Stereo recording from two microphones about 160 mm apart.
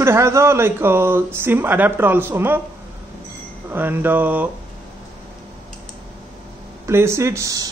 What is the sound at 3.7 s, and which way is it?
Speech, 10° right (ahead or behind).